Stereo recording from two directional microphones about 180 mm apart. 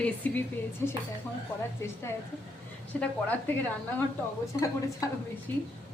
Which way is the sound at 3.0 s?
10° left (ahead or behind).